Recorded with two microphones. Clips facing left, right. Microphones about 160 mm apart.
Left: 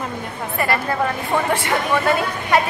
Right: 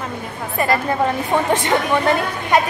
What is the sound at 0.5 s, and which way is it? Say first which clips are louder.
A woman's voice: right 3 dB; 20° right (ahead or behind).